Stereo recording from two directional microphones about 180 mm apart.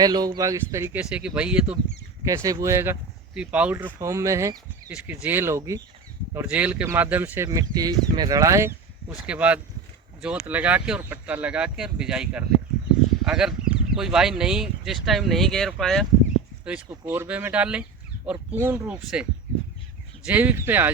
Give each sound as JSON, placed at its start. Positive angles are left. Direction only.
{"t": 0.0, "sound": "speech", "side_deg": -20}
{"t": 2.2, "sound": "speech", "side_deg": -20}
{"t": 16.6, "sound": "speech", "side_deg": -10}